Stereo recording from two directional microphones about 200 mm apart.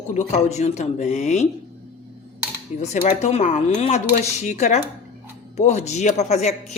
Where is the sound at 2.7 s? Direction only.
35° left (ahead or behind).